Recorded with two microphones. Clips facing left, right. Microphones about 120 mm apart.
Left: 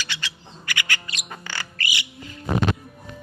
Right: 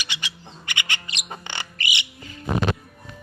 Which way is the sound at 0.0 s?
15° right (ahead or behind).